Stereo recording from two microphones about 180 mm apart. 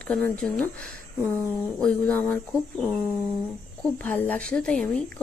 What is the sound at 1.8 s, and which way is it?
Speech, 5° left (ahead or behind).